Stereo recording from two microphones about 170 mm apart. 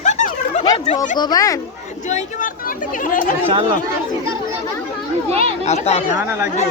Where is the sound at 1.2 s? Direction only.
25° left (ahead or behind).